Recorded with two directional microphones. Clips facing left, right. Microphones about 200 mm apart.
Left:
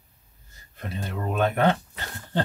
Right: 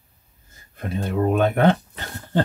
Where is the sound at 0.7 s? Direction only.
50° right (ahead or behind).